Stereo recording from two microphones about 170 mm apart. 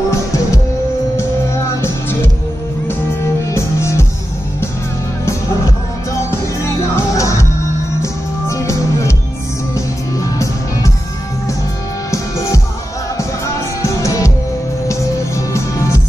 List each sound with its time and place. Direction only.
1.1 s music: 15° left (ahead or behind)
3.4 s music: 15° left (ahead or behind)
6.6 s music: 15° left (ahead or behind)
12.1 s music: 20° left (ahead or behind)
13.8 s music: 20° left (ahead or behind)